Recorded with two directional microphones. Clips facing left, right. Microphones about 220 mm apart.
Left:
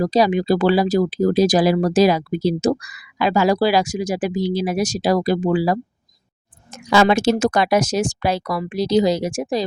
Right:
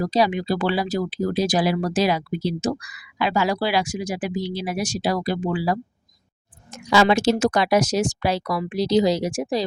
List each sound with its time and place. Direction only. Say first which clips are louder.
0.0 s speech: left 4 dB; 40° left (ahead or behind)
6.9 s speech: left 2 dB; 50° left (ahead or behind)